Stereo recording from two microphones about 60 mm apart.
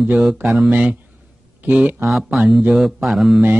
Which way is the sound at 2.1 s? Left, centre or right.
Centre.